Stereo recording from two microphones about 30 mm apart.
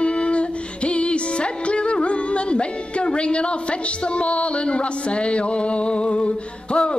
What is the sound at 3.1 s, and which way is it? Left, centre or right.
Music, left.